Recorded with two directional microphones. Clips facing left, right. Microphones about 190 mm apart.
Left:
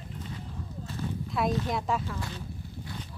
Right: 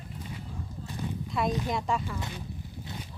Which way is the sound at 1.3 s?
Centre (ahead or behind).